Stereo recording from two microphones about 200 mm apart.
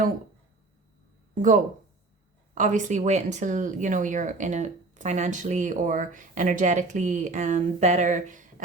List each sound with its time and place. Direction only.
1.4 s speech: 40° right (ahead or behind)